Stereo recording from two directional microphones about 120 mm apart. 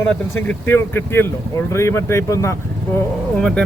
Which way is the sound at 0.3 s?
15° left (ahead or behind).